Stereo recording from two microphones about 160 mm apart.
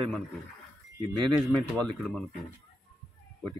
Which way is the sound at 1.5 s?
5° left (ahead or behind).